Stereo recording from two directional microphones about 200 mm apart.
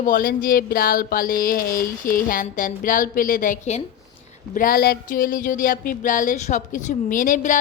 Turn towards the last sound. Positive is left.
turn(degrees=40)  # may be behind; listen again after turning